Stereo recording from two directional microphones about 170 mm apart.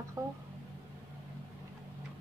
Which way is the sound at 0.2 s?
20° right (ahead or behind).